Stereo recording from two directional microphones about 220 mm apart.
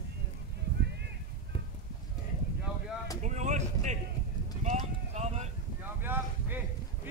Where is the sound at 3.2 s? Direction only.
35° right (ahead or behind).